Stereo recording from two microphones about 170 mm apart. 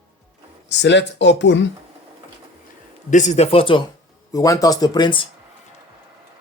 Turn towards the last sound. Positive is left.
turn(degrees=25)  # may be behind; listen again after turning